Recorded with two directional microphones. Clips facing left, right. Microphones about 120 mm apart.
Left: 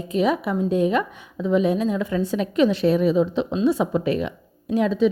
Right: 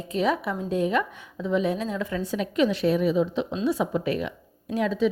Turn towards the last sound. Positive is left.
turn(degrees=25)  # may be behind; listen again after turning